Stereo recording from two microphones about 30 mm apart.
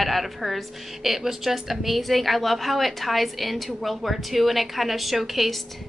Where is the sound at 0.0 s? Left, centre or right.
Centre.